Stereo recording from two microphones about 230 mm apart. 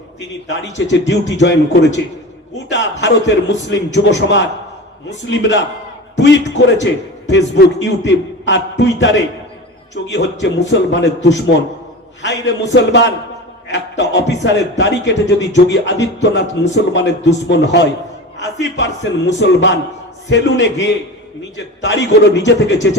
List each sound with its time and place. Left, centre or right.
0.6 s a man's voice: left